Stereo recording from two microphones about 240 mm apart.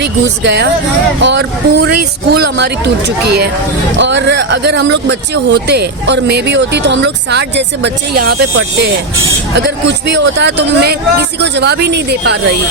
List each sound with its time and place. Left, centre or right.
0.0 s speech: right
3.9 s speech: right
9.6 s speech: right